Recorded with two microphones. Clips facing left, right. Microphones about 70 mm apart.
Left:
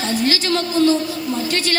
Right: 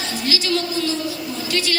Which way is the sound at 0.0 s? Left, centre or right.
Left.